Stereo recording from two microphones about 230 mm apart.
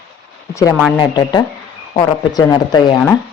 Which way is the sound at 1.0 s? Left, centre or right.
Centre.